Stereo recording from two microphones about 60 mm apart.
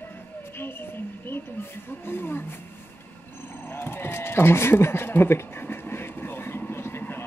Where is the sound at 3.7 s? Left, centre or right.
Left.